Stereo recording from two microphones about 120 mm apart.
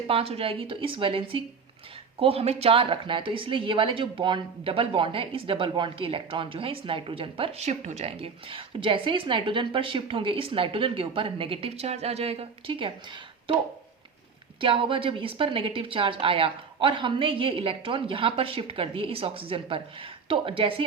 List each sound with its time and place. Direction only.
0.1 s a woman's voice: 55° right (ahead or behind)
7.6 s a woman's voice: 75° right (ahead or behind); by 12.9 s 50° right (ahead or behind)
14.6 s a woman's voice: 45° right (ahead or behind)